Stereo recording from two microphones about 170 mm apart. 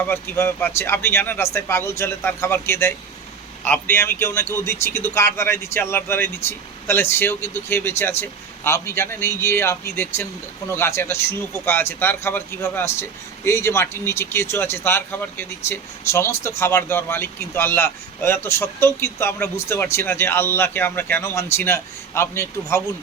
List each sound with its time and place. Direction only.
0.0 s speech: 15° left (ahead or behind)